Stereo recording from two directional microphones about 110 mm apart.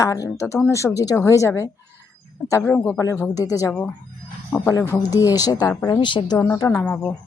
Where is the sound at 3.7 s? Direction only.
10° left (ahead or behind).